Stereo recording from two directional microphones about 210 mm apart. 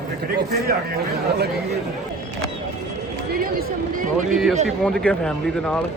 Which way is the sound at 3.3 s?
45° right (ahead or behind).